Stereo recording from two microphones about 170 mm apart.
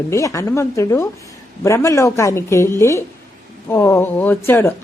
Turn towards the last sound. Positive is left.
turn(degrees=15)  # may be behind; listen again after turning